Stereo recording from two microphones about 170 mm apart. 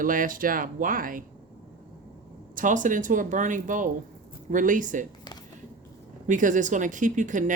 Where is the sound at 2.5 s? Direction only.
50° right (ahead or behind).